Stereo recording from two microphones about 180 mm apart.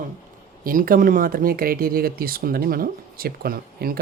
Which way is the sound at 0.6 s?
50° right (ahead or behind).